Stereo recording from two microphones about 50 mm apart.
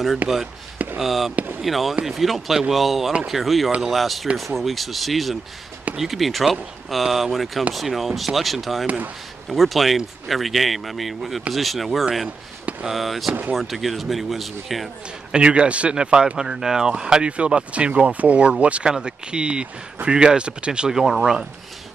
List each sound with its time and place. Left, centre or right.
0.2 s speech: right
0.9 s speech: centre
8.8 s speech: right
9.5 s speech: centre
13.3 s speech: right
13.6 s speech: centre
15.3 s speech: right
20.9 s speech: centre